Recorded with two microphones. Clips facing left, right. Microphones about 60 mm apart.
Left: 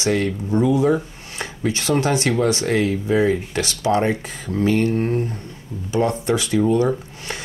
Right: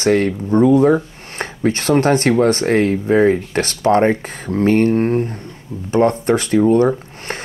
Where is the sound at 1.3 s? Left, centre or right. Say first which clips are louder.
Right 5 dB; right.